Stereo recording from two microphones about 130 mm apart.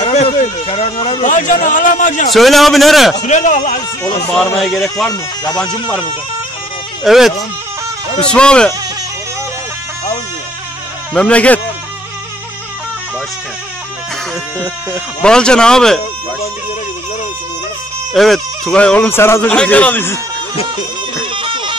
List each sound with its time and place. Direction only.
0.0 s a sound: 55° left (ahead or behind)
0.4 s speech: 45° left (ahead or behind)
1.2 s a man's voice: 80° left
2.3 s a man's voice: centre (ahead or behind)
3.2 s speech: 70° left (ahead or behind)
4.6 s a man's voice: centre (ahead or behind)
7.1 s a man's voice: centre (ahead or behind)
11.1 s speech: 10° left (ahead or behind)
15.2 s a man's voice: 5° left (ahead or behind)
18.1 s speech: centre (ahead or behind)
21.3 s music: 40° right (ahead or behind)